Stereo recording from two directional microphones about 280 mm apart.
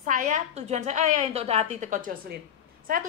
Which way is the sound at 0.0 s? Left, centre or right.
Right.